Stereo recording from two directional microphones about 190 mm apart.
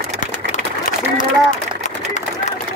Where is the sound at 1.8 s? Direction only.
40° left (ahead or behind).